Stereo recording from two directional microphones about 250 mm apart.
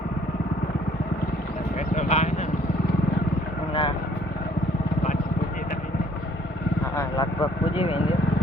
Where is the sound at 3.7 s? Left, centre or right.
Left.